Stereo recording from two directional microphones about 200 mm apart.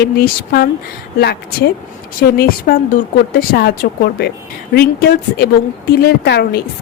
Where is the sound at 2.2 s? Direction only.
50° left (ahead or behind).